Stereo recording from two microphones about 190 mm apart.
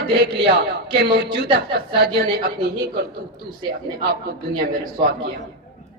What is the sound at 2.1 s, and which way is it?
Speech, 55° right (ahead or behind).